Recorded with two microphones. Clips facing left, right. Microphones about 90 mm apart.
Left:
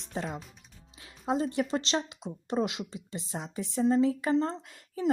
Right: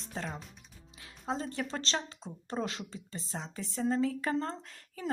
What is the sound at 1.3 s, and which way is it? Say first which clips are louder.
Speech: left 7 dB; 15° left (ahead or behind).